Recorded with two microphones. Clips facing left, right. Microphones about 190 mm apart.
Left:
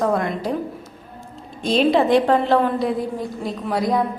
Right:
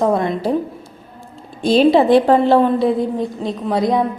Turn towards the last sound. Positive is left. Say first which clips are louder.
# right 4 dB
turn(degrees=-20)  # may be behind; listen again after turning